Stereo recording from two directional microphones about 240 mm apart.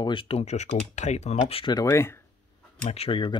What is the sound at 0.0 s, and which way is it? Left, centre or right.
Speech, left.